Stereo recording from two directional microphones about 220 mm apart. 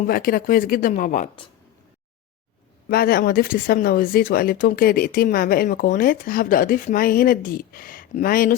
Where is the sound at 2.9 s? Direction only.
45° left (ahead or behind).